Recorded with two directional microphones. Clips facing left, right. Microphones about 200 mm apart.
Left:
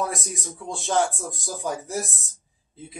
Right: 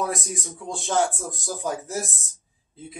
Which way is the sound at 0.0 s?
Centre (ahead or behind).